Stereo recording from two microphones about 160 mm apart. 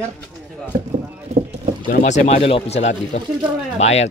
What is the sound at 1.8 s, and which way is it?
Speech, 50° left (ahead or behind).